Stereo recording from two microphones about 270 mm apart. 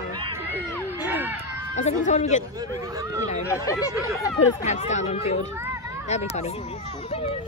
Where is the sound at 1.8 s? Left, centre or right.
Left.